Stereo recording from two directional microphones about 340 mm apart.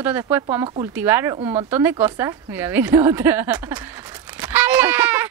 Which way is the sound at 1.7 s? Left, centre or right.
Centre.